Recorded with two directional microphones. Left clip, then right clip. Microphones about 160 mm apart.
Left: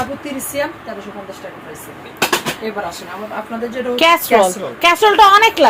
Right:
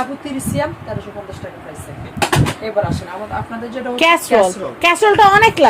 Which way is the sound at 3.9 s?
10° right (ahead or behind).